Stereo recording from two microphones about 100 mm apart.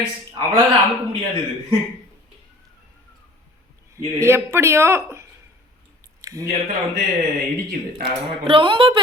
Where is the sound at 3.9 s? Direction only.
30° right (ahead or behind).